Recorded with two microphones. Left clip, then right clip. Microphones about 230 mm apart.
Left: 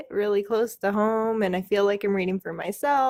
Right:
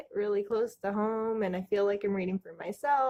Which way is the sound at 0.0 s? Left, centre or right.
Left.